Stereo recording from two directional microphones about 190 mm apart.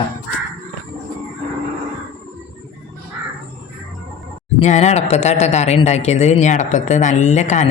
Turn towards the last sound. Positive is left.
turn(degrees=40)  # may be behind; listen again after turning